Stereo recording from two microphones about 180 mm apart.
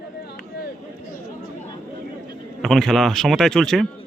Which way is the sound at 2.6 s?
Centre (ahead or behind).